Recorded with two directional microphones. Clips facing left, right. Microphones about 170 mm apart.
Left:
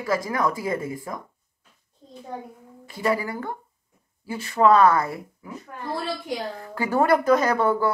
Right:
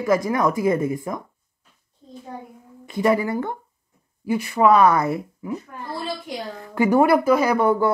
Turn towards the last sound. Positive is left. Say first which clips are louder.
# right 3 dB
turn(degrees=-15)  # may be behind; listen again after turning